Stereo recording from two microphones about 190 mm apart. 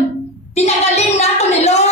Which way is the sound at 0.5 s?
35° left (ahead or behind).